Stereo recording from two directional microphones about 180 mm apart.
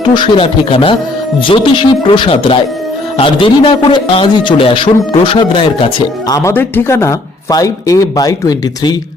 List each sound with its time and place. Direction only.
0.0 s a man's voice: 25° left (ahead or behind)
6.3 s a man's voice: 15° left (ahead or behind)